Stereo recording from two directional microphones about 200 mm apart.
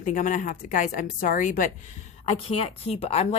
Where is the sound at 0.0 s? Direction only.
40° left (ahead or behind).